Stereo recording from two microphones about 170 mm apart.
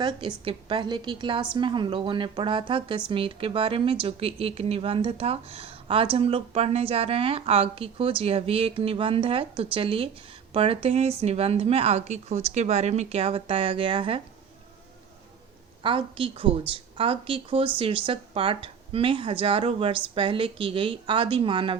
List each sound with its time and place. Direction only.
0.0 s a woman's voice: 30° right (ahead or behind)
15.8 s speech: 30° right (ahead or behind)